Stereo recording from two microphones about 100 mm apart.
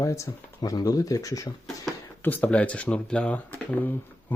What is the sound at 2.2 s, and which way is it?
Speech, 15° left (ahead or behind).